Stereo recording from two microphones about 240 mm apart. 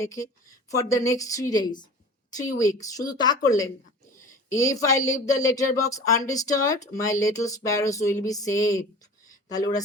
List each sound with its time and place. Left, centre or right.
0.7 s speech: centre